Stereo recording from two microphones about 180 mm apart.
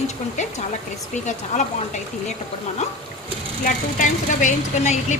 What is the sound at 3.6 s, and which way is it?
A woman's voice, 45° left (ahead or behind).